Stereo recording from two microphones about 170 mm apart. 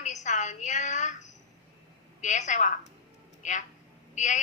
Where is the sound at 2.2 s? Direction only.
45° left (ahead or behind).